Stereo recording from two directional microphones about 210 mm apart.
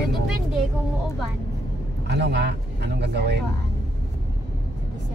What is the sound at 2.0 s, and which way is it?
Speech, 55° right (ahead or behind).